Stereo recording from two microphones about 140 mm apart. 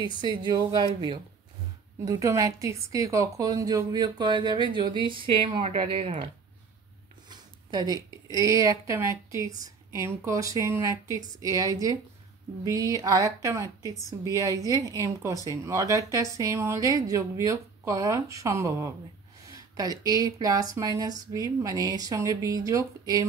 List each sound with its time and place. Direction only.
0.2 s speech: 30° right (ahead or behind)
2.0 s speech: 20° right (ahead or behind)